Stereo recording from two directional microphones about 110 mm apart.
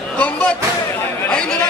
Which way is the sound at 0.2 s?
15° left (ahead or behind).